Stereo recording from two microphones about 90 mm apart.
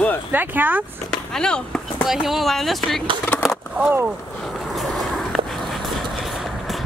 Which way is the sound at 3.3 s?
15° left (ahead or behind).